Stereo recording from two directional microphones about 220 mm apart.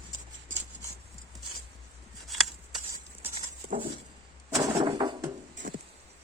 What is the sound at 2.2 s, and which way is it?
Scissors, centre (ahead or behind).